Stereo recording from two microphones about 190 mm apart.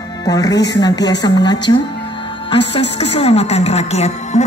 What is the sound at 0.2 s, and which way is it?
A woman's voice, 20° left (ahead or behind).